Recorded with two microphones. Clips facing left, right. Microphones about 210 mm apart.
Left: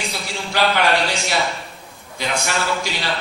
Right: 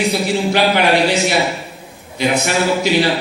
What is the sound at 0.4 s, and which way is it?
A man's voice, 20° right (ahead or behind).